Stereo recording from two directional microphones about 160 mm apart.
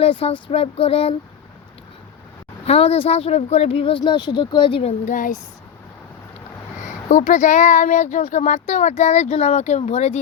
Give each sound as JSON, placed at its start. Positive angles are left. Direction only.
{"t": 0.0, "sound": "speech", "side_deg": 35}
{"t": 2.6, "sound": "speech", "side_deg": 40}
{"t": 5.0, "sound": "speech", "side_deg": 55}
{"t": 7.1, "sound": "speech", "side_deg": 55}